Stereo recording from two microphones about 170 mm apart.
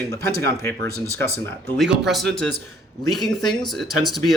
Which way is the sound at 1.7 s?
Centre (ahead or behind).